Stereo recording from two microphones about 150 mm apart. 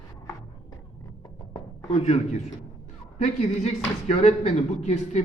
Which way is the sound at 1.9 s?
45° left (ahead or behind).